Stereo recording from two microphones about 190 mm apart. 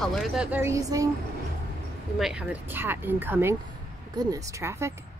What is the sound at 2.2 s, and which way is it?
Speech, 5° right (ahead or behind).